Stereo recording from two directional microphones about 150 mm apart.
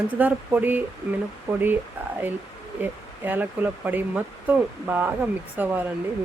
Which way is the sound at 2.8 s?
10° right (ahead or behind).